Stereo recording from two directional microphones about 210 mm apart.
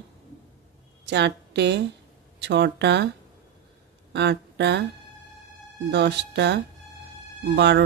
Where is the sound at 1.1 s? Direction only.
55° right (ahead or behind).